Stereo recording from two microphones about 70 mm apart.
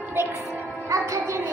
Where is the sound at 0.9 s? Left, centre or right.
Right.